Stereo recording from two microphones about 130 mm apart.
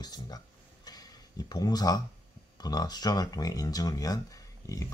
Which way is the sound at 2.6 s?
30° left (ahead or behind).